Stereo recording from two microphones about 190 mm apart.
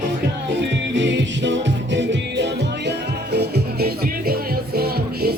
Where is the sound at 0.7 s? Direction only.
70° right (ahead or behind).